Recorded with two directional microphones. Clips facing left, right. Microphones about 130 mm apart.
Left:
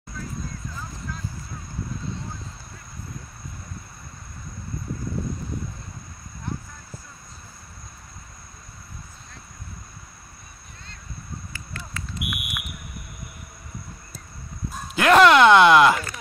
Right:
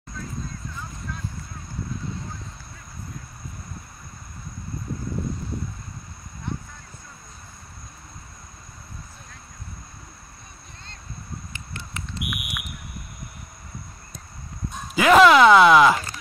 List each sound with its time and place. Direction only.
11.5 s a sound: 25° right (ahead or behind)
12.2 s fire alarm: centre (ahead or behind)
14.7 s dog: centre (ahead or behind)